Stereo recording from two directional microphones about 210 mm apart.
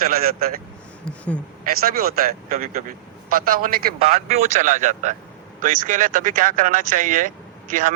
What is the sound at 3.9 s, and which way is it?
Speech, 30° right (ahead or behind).